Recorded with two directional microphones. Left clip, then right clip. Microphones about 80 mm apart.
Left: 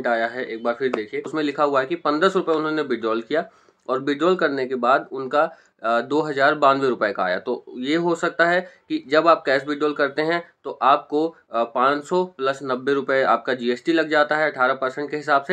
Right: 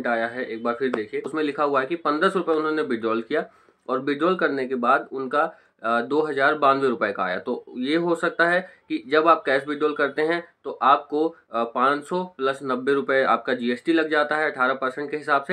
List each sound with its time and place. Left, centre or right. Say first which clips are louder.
0.0 s speech: left 2 dB; left